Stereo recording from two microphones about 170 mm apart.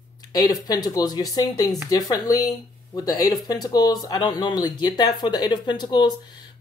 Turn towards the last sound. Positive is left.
turn(degrees=25)  # may be behind; listen again after turning